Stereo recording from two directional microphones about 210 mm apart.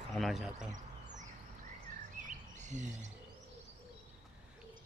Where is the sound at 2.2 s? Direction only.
35° right (ahead or behind).